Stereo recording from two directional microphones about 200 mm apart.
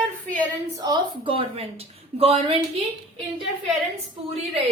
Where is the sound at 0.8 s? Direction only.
20° right (ahead or behind).